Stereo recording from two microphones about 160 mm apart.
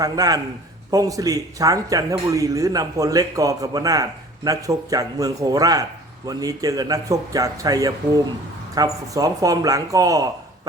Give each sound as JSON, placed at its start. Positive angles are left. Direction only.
{"t": 0.0, "sound": "a man's voice", "side_deg": -25}